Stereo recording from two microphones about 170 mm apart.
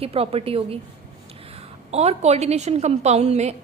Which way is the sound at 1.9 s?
40° right (ahead or behind).